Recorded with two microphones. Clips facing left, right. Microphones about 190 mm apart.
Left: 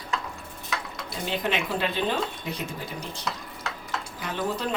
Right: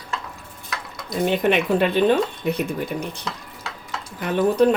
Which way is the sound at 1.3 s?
60° right (ahead or behind).